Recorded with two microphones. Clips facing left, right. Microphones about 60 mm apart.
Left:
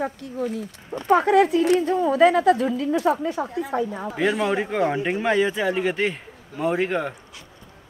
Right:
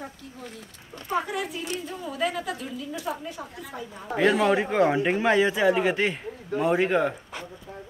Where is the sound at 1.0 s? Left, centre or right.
Left.